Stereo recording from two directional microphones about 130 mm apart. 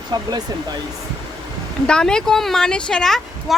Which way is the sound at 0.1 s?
30° right (ahead or behind).